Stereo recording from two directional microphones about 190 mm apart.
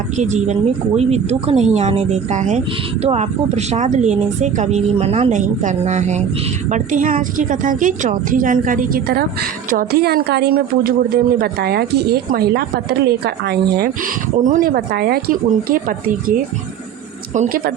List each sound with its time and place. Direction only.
0.2 s a woman's voice: 35° right (ahead or behind); by 13.9 s 55° right (ahead or behind)
14.4 s a woman's voice: 45° right (ahead or behind)
17.3 s a woman's voice: 50° right (ahead or behind)